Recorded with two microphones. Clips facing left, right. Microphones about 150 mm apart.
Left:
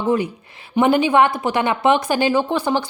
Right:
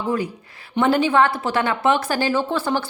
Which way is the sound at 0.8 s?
15° left (ahead or behind).